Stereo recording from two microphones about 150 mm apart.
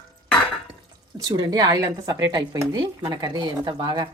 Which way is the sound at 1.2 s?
25° right (ahead or behind).